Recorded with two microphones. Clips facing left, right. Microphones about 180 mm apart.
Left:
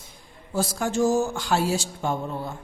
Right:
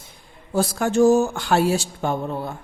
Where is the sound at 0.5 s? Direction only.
60° right (ahead or behind).